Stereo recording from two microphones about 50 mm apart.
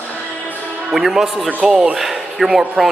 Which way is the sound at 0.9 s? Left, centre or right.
Centre.